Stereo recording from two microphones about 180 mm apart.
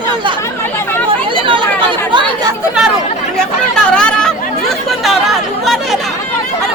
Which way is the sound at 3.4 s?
5° left (ahead or behind).